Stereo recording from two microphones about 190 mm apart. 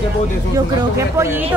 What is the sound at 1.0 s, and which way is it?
Speech, 15° right (ahead or behind).